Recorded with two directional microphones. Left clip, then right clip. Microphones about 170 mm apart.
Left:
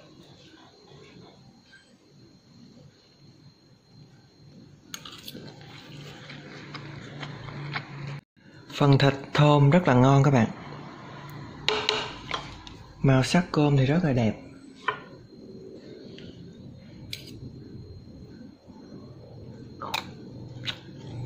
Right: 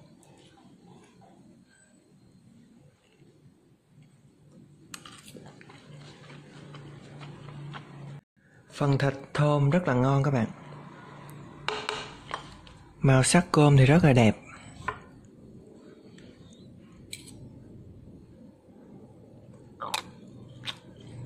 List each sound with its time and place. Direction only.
8.7 s a man's voice: 5° right (ahead or behind)
11.6 s a sound: 5° left (ahead or behind)
13.0 s speech: 30° right (ahead or behind)
19.8 s tick-tock: 20° right (ahead or behind)